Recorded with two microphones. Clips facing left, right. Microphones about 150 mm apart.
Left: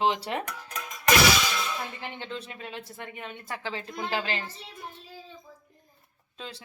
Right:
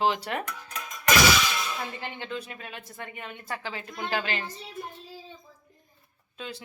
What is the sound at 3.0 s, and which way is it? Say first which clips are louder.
Speech: right 3 dB; 5° right (ahead or behind).